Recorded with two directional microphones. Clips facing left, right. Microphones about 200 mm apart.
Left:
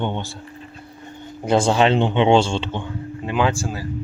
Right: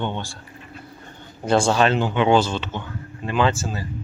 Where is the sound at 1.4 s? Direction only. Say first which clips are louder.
Left 1 dB; 20° left (ahead or behind).